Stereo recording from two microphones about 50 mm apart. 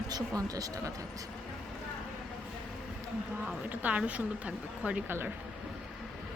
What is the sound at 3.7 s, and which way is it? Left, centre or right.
A woman's voice, right.